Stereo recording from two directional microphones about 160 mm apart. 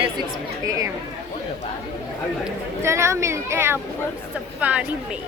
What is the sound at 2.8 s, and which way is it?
Speech, 15° right (ahead or behind).